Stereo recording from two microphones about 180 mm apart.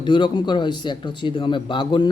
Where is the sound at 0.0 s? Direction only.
25° left (ahead or behind).